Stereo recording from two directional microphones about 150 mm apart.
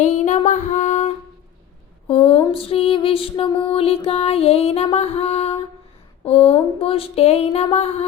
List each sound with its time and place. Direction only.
0.0 s music: 50° left (ahead or behind)
2.0 s music: 40° left (ahead or behind)
6.6 s speech: 40° left (ahead or behind)